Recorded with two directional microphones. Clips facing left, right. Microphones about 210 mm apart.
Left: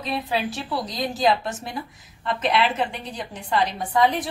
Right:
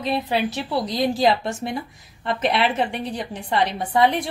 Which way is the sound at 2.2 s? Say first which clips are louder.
Right 1 dB; 35° right (ahead or behind).